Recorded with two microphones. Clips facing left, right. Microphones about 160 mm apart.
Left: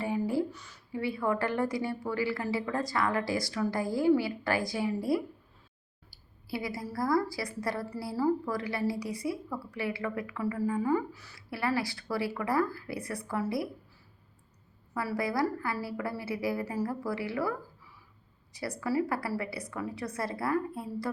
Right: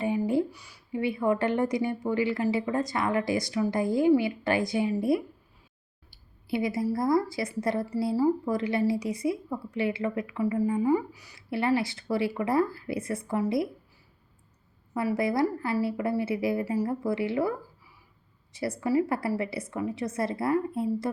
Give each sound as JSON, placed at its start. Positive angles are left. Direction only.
{"t": 0.0, "sound": "a woman's voice", "side_deg": -20}
{"t": 6.1, "sound": "a sound", "side_deg": -20}
{"t": 6.9, "sound": "a woman's voice", "side_deg": -20}
{"t": 14.9, "sound": "a woman's voice", "side_deg": -20}
{"t": 18.5, "sound": "a woman's voice", "side_deg": -25}